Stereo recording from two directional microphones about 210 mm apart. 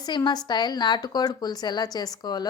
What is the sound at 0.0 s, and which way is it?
A woman's voice, 20° left (ahead or behind).